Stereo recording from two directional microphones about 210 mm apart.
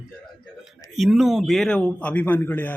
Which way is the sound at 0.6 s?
Centre (ahead or behind).